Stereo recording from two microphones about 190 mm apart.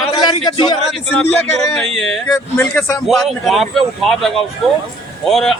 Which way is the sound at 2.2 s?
10° left (ahead or behind).